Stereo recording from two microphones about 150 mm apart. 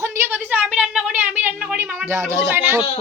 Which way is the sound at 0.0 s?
15° right (ahead or behind).